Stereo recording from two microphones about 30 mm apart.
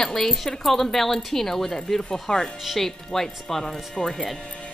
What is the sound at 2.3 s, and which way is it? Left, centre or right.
Speech, left.